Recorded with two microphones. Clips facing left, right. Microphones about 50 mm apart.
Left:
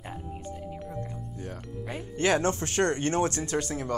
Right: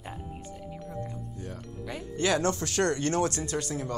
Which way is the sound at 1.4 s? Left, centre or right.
Left.